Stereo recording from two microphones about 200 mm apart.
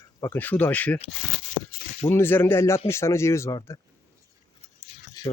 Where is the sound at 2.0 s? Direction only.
10° left (ahead or behind).